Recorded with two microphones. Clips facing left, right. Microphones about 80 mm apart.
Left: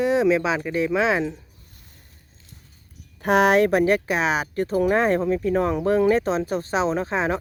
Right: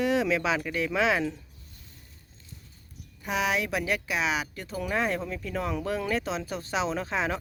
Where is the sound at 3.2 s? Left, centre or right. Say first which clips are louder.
Left 11 dB; left.